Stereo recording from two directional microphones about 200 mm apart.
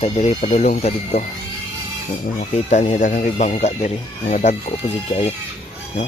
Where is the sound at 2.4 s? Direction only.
35° left (ahead or behind).